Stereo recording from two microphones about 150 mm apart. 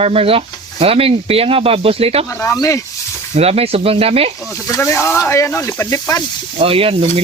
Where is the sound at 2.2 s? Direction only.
20° left (ahead or behind).